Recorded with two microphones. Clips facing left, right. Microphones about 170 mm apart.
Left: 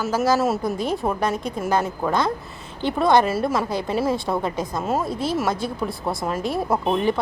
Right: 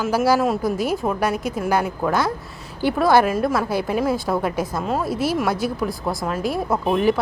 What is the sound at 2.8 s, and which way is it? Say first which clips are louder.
Speech: right 1 dB; 5° right (ahead or behind).